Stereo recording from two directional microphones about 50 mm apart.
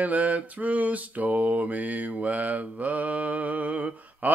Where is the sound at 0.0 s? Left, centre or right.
Right.